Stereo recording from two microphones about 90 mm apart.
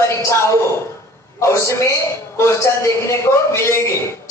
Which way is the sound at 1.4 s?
30° left (ahead or behind).